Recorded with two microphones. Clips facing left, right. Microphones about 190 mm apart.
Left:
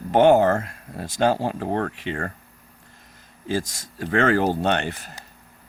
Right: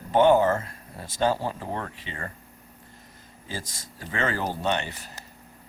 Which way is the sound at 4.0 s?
70° left (ahead or behind).